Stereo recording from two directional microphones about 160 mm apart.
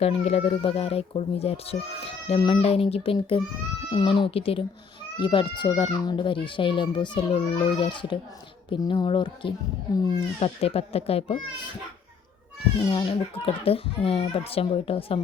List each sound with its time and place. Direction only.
0.0 s a child's voice: 40° left (ahead or behind)
12.9 s a child's voice: 35° left (ahead or behind)